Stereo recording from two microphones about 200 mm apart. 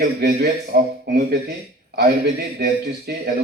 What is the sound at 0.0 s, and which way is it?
A man's voice, 50° right (ahead or behind).